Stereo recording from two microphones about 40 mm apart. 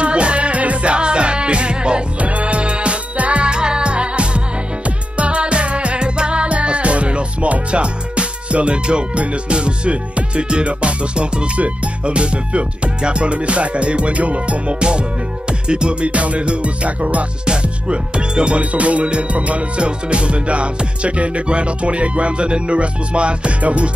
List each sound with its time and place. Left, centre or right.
0.0 s music: right
18.6 s music: right